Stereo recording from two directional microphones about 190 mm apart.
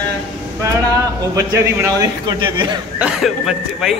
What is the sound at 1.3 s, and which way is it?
A man's voice, 15° right (ahead or behind).